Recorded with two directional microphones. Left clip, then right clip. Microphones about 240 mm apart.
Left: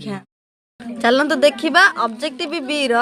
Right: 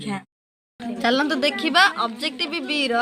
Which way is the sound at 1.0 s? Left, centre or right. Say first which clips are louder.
Left 6 dB; left.